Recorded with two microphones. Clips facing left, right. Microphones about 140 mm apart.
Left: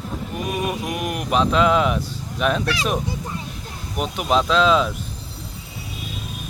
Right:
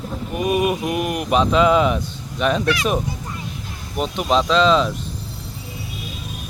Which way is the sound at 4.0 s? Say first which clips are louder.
Right 1 dB; 5° left (ahead or behind).